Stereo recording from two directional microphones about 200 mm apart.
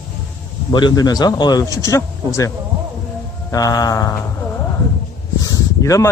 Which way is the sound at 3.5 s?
20° left (ahead or behind).